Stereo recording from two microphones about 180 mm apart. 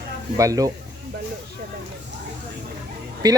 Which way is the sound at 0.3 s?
20° right (ahead or behind).